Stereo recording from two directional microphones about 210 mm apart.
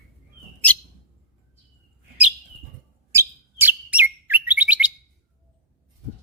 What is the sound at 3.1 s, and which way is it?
Chirp, 10° right (ahead or behind).